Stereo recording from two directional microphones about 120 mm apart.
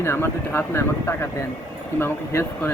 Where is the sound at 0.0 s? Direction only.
20° left (ahead or behind).